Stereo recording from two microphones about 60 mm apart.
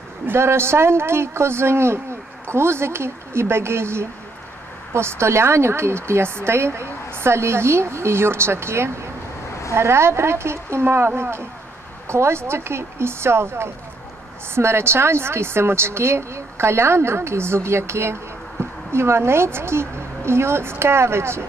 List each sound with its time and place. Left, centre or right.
0.3 s speech: right